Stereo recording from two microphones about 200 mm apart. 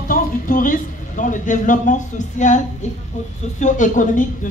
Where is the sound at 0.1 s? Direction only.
40° left (ahead or behind).